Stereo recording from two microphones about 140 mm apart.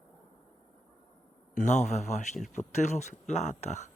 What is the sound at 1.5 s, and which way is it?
Speech, 60° left (ahead or behind).